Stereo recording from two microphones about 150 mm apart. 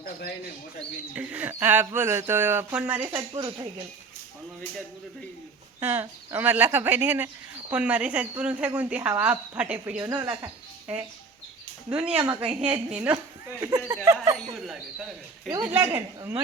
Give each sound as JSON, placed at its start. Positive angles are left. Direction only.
{"t": 1.1, "sound": "speech", "side_deg": -10}
{"t": 3.3, "sound": "speech", "side_deg": -25}
{"t": 5.8, "sound": "speech", "side_deg": -15}
{"t": 10.0, "sound": "speech", "side_deg": -25}
{"t": 12.1, "sound": "a woman's voice", "side_deg": -30}
{"t": 12.5, "sound": "speech", "side_deg": -10}
{"t": 13.6, "sound": "speech", "side_deg": -25}
{"t": 14.3, "sound": "speech", "side_deg": 0}
{"t": 15.6, "sound": "speech", "side_deg": -15}